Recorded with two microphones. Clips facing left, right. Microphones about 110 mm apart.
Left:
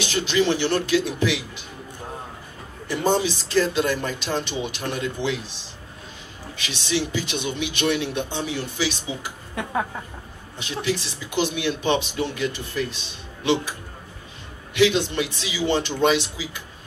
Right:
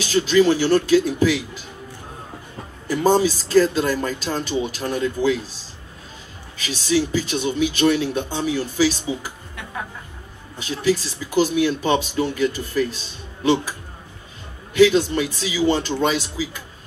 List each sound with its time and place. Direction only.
0.0 s speech: 40° right (ahead or behind)
2.9 s speech: 40° right (ahead or behind)
6.6 s speech: 40° right (ahead or behind)
10.6 s speech: 40° right (ahead or behind)